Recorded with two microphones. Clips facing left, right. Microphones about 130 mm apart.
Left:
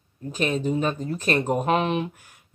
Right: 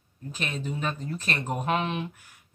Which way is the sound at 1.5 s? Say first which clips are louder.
Left 3 dB; 30° left (ahead or behind).